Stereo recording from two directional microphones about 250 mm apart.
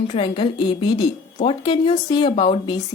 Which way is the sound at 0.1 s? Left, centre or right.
Left.